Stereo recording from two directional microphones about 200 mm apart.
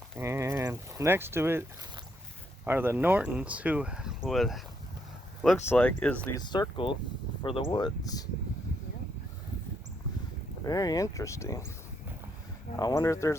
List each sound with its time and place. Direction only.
0.2 s speech: 15° right (ahead or behind)
2.6 s speech: 10° right (ahead or behind)
5.6 s speech: 5° left (ahead or behind)
6.4 s speech: 20° left (ahead or behind)
10.7 s speech: 20° left (ahead or behind)
12.7 s speech: 15° left (ahead or behind)